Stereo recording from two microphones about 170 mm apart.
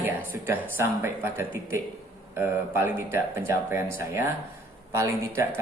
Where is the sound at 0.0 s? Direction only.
10° right (ahead or behind).